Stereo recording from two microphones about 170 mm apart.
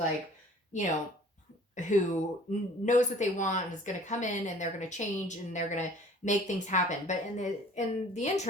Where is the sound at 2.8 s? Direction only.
45° left (ahead or behind).